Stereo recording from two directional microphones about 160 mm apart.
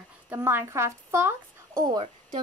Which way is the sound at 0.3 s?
15° right (ahead or behind).